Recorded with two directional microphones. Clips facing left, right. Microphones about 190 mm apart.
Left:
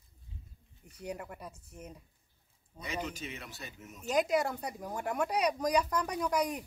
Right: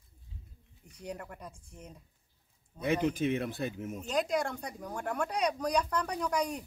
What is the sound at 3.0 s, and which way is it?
Speech, 55° right (ahead or behind).